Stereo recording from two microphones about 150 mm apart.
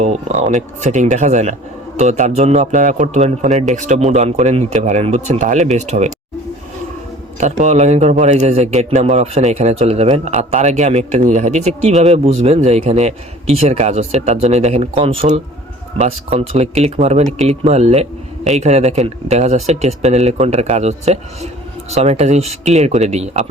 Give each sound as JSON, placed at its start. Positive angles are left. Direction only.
{"t": 0.0, "sound": "a man's voice", "side_deg": -45}
{"t": 7.3, "sound": "a man's voice", "side_deg": -50}